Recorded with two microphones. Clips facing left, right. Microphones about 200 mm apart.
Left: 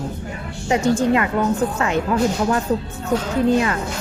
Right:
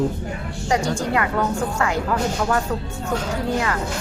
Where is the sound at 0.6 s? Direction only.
20° left (ahead or behind).